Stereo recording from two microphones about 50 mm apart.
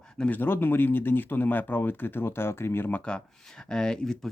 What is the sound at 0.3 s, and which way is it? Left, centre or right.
Speech, left.